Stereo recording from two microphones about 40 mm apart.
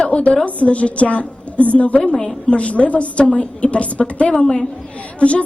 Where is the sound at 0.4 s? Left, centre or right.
Left.